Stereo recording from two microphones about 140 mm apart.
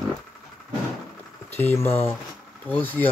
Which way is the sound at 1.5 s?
15° left (ahead or behind).